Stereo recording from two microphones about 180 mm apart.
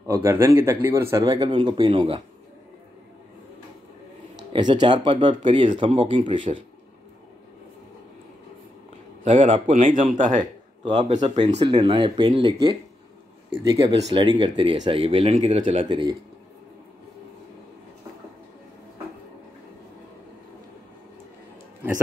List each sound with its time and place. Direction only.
0.0 s speech: 15° right (ahead or behind)
4.5 s speech: 25° right (ahead or behind)
9.2 s a man's voice: 40° right (ahead or behind)
10.8 s speech: 30° right (ahead or behind)